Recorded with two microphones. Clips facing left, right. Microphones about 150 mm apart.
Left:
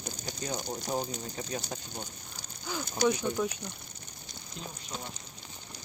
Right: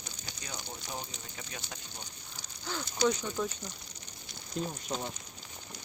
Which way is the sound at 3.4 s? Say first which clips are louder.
Left 1 dB; 5° left (ahead or behind).